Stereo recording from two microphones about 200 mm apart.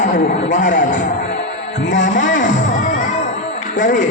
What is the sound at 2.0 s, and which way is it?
Music, 40° left (ahead or behind).